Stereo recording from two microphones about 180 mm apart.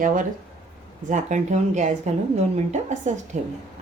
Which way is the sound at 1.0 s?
45° right (ahead or behind).